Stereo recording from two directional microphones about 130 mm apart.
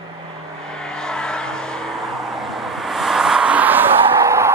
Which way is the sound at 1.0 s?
5° left (ahead or behind).